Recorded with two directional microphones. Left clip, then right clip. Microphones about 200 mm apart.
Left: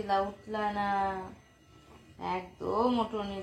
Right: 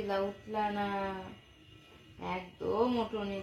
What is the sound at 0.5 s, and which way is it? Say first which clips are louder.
Speech: left 2 dB; 30° left (ahead or behind).